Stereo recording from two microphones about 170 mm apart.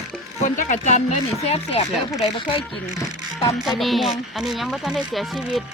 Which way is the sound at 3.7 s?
Centre (ahead or behind).